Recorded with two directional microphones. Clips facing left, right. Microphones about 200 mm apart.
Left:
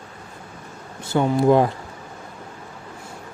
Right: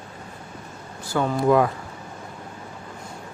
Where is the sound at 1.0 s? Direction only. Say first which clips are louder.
Left 4 dB; 25° left (ahead or behind).